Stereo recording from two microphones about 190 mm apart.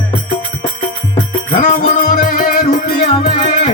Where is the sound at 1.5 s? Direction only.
40° left (ahead or behind).